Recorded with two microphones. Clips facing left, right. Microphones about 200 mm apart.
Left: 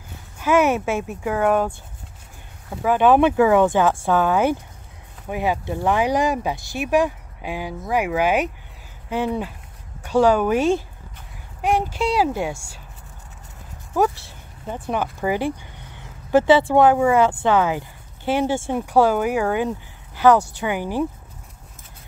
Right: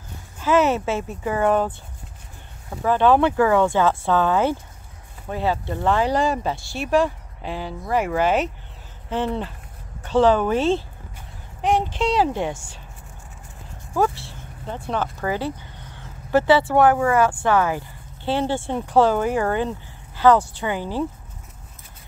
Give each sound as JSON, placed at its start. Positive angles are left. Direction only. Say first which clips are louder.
{"t": 0.4, "sound": "speech", "louder": "left 1 dB", "side_deg": 10}
{"t": 2.8, "sound": "speech", "louder": "left 1 dB", "side_deg": 10}
{"t": 13.9, "sound": "speech", "louder": "left 1 dB", "side_deg": 15}